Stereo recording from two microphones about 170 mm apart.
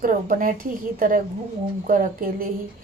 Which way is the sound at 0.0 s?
55° right (ahead or behind).